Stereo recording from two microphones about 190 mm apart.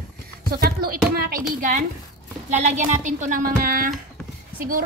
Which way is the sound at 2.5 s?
40° right (ahead or behind).